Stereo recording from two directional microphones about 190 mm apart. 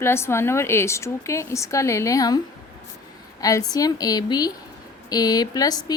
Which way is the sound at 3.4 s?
20° left (ahead or behind).